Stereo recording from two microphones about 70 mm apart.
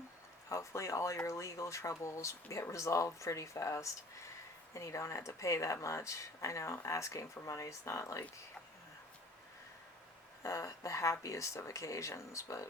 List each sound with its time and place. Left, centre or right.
0.4 s speech: left
10.4 s speech: left